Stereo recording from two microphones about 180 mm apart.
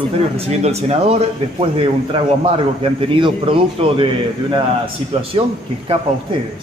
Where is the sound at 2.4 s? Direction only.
30° right (ahead or behind).